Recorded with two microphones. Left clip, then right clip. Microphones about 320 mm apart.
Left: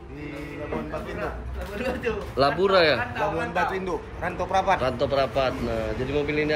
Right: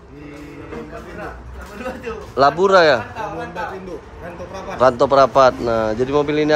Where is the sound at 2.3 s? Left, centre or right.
Centre.